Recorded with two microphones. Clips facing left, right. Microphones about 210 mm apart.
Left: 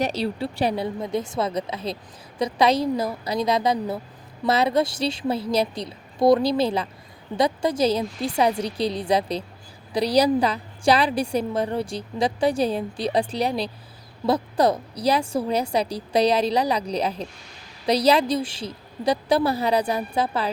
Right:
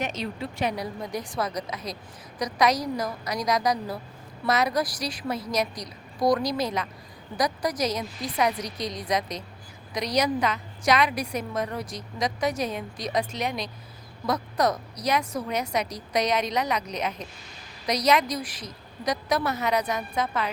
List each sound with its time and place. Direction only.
0.0 s a woman's voice: 35° left (ahead or behind)